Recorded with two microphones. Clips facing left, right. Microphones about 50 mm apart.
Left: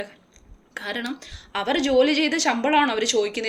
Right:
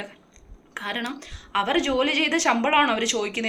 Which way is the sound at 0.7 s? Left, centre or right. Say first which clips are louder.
Even; right.